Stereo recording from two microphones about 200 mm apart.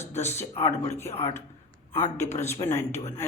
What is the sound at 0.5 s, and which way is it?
Speech, 30° left (ahead or behind).